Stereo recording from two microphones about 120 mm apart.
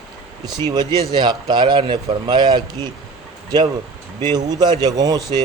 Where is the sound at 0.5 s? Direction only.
35° right (ahead or behind).